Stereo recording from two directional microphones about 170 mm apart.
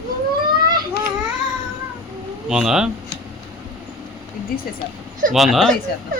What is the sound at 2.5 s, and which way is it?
Speech, 5° right (ahead or behind).